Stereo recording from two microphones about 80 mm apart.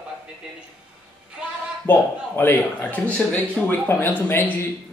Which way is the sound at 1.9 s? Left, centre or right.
Left.